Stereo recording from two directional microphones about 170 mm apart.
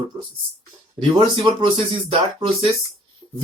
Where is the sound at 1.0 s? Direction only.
30° right (ahead or behind).